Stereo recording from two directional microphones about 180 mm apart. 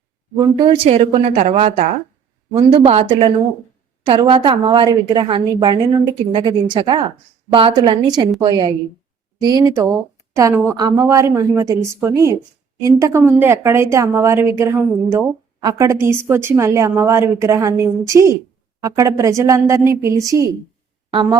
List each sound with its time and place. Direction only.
0.3 s a woman's voice: 20° right (ahead or behind)